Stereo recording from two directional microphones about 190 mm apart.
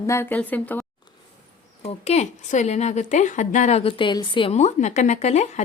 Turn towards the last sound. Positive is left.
turn(degrees=35)  # may be behind; listen again after turning